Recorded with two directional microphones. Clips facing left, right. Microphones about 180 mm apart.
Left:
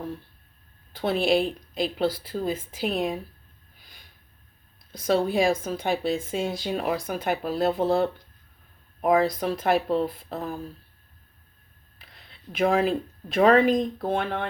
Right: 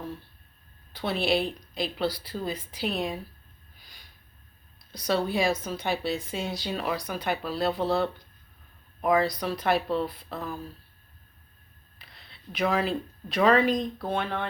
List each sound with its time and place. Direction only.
0.9 s speech: 45° left (ahead or behind)
4.9 s speech: 50° left (ahead or behind)
11.9 s speech: 45° left (ahead or behind)